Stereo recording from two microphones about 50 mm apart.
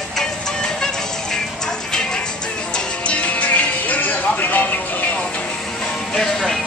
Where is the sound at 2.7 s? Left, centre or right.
Left.